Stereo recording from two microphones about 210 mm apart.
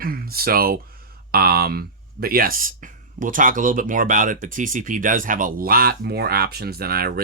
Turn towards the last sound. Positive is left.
turn(degrees=-45)  # may be behind; listen again after turning